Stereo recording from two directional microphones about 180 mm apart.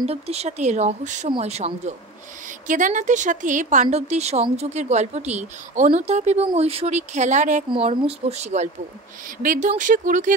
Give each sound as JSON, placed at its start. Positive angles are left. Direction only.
{"t": 0.0, "sound": "speech", "side_deg": -35}